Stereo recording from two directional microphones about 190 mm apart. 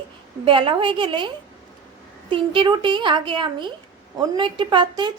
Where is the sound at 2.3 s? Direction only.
25° right (ahead or behind).